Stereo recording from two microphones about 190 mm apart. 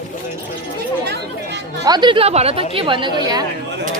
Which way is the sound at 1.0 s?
60° right (ahead or behind).